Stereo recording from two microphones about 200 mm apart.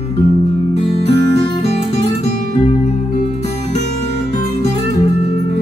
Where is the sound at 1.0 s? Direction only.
55° right (ahead or behind).